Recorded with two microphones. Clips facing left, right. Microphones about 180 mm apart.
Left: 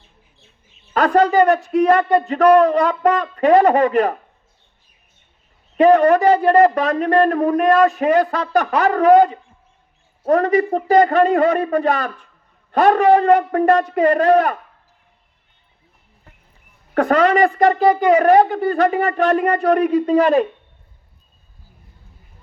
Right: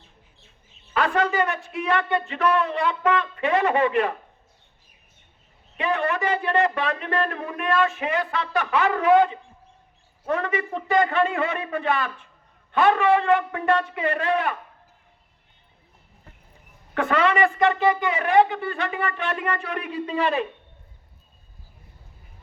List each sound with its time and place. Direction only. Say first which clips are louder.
0.9 s speech: left 8 dB; 40° left (ahead or behind)
5.7 s speech: left 13 dB; 40° left (ahead or behind)
16.9 s speech: left 7 dB; 40° left (ahead or behind)